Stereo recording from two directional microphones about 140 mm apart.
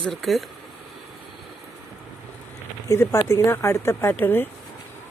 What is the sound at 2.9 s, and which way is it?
Speech, 20° left (ahead or behind).